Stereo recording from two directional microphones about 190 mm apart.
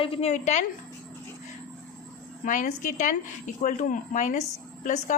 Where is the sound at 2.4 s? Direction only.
45° left (ahead or behind).